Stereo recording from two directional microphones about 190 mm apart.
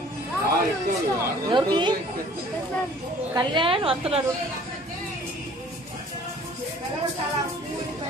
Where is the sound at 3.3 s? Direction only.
25° right (ahead or behind).